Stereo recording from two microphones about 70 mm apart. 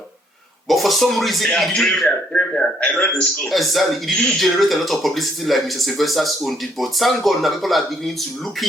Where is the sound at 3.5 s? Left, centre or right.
Centre.